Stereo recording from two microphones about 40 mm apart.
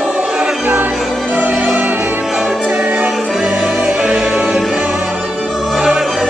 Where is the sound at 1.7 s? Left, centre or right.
Right.